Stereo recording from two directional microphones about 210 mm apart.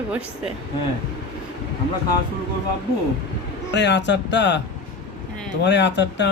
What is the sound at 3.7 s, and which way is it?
Speech, 55° left (ahead or behind).